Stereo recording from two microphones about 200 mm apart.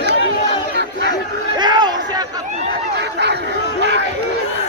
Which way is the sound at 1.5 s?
20° right (ahead or behind).